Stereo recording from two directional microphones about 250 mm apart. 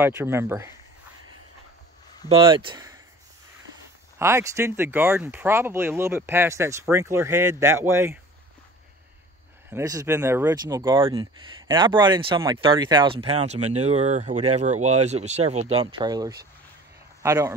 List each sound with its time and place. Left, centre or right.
0.0 s speech: centre
2.2 s speech: right
4.2 s speech: centre
9.7 s speech: centre